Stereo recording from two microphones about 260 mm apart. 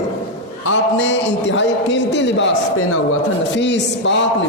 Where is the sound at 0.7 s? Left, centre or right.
Left.